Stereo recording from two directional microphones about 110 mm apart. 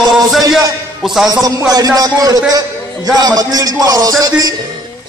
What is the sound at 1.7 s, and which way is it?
A man's voice, 35° right (ahead or behind).